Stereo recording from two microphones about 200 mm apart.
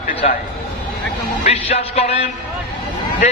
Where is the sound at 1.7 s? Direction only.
30° left (ahead or behind).